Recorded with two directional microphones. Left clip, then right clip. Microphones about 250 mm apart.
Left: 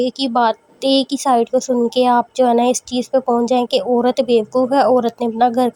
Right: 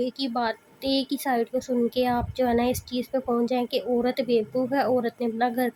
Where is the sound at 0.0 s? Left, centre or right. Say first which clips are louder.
Left 11 dB; left.